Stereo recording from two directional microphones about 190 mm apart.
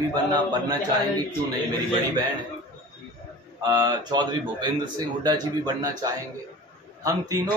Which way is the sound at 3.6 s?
20° right (ahead or behind).